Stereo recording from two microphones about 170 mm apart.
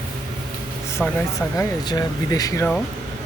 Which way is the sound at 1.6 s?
20° left (ahead or behind).